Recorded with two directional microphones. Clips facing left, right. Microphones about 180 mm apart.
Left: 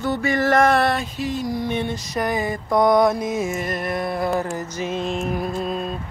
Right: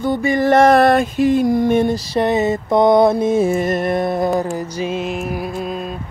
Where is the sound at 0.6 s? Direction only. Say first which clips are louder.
Right 9 dB; 40° right (ahead or behind); by 4.3 s 25° right (ahead or behind).